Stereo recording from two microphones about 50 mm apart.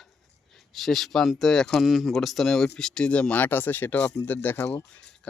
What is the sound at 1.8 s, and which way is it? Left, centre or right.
Speech, centre.